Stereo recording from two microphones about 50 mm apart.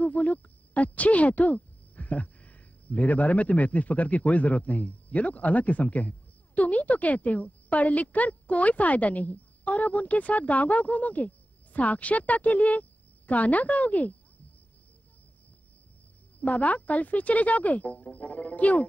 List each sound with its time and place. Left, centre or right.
0.0 s speech: left
16.3 s speech: left